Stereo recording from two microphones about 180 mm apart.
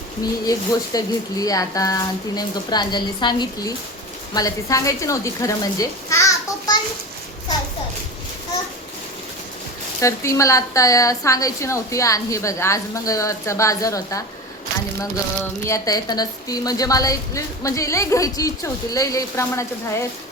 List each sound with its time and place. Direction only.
0.2 s a woman's voice: 20° left (ahead or behind)
10.0 s a woman's voice: 15° left (ahead or behind)
15.6 s a woman's voice: 20° left (ahead or behind)